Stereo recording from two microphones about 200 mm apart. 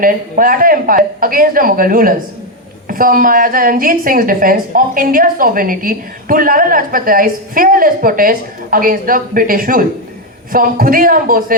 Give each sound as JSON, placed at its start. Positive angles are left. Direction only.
{"t": 0.0, "sound": "a woman's voice", "side_deg": -45}